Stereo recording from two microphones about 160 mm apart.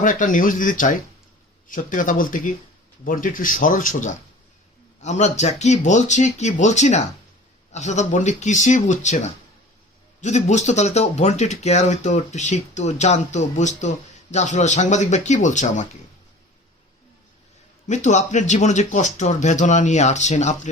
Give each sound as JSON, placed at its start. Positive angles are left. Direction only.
{"t": 0.0, "sound": "speech", "side_deg": 55}
{"t": 17.8, "sound": "speech", "side_deg": 50}